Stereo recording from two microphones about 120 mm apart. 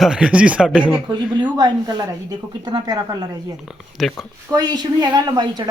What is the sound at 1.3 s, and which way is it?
Speech, 35° right (ahead or behind).